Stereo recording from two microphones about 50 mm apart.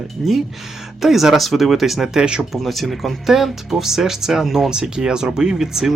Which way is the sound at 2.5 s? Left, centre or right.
Centre.